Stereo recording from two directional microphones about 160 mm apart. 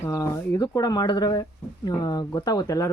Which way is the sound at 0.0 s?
15° left (ahead or behind).